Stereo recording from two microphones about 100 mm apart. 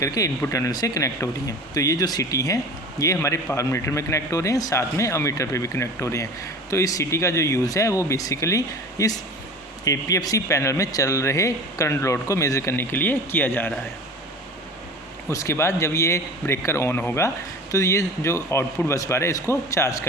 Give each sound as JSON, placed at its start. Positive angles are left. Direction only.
{"t": 0.0, "sound": "speech", "side_deg": 35}
{"t": 15.3, "sound": "speech", "side_deg": 30}